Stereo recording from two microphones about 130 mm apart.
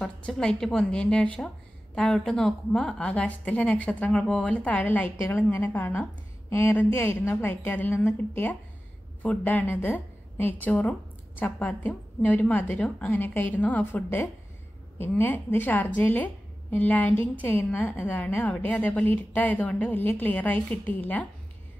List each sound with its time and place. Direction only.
0.0 s a woman's voice: 5° left (ahead or behind)